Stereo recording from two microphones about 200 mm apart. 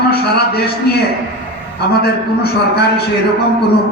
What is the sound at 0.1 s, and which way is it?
Speech, 50° left (ahead or behind).